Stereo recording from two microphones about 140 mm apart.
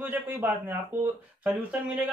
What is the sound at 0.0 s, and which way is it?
Speech, 15° right (ahead or behind).